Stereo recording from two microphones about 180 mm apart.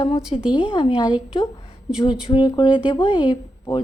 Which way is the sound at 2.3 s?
25° left (ahead or behind).